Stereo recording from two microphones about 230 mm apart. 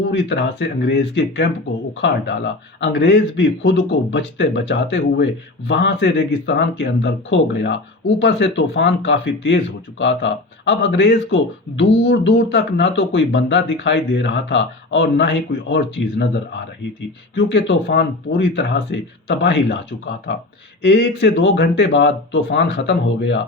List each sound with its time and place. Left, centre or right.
0.1 s speech: left